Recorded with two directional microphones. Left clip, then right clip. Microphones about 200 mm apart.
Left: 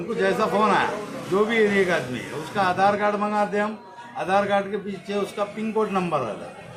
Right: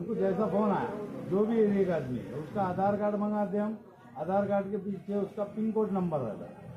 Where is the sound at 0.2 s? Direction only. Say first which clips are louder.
Left 9 dB; 35° left (ahead or behind).